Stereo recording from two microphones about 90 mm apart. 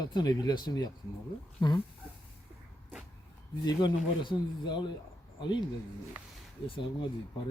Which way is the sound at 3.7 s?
55° left (ahead or behind).